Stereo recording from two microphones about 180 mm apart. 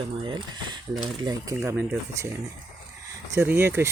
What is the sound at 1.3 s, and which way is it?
Speech, 20° right (ahead or behind).